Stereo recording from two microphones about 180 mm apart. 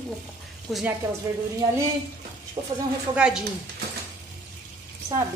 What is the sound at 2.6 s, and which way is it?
Speech, 20° right (ahead or behind).